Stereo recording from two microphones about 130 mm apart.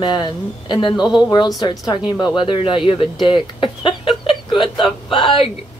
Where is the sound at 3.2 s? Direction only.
35° left (ahead or behind).